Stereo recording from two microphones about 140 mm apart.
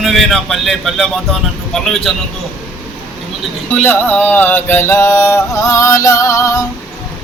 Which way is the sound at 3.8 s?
15° left (ahead or behind).